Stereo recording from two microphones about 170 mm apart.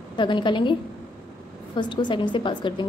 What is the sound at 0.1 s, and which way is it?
Speech, 30° left (ahead or behind).